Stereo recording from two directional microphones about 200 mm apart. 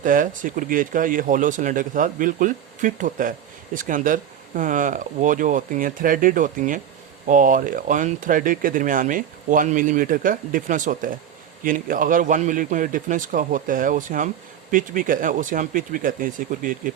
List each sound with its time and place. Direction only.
0.0 s speech: 40° right (ahead or behind)